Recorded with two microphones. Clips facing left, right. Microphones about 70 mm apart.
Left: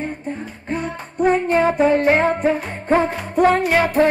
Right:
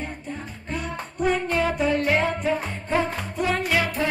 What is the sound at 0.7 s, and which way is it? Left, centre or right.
Music, left.